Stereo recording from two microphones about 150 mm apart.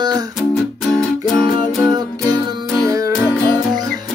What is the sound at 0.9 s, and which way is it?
Music, 5° left (ahead or behind).